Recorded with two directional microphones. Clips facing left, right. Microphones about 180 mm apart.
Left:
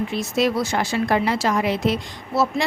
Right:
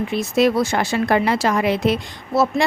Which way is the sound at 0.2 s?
55° right (ahead or behind).